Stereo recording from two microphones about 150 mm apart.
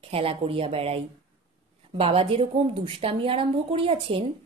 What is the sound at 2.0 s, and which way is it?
A woman's voice, 40° right (ahead or behind).